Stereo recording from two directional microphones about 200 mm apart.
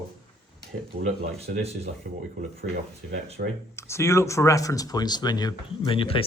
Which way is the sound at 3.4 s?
50° right (ahead or behind).